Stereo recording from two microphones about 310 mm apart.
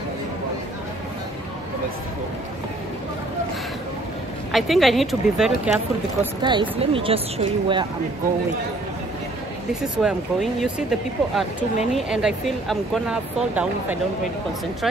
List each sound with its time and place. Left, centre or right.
4.5 s speech: centre
6.4 s speech: centre
10.0 s speech: centre